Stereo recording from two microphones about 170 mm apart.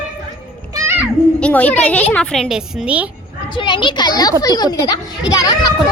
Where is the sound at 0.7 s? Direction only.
15° right (ahead or behind).